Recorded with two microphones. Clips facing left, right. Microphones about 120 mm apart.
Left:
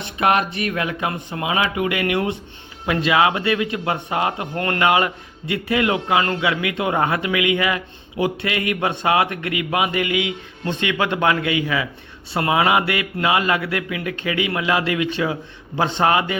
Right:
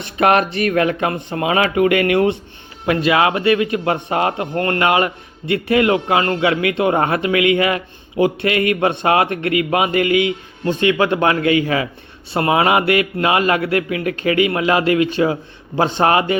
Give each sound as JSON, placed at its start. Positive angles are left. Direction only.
{"t": 0.2, "sound": "a man's voice", "side_deg": -55}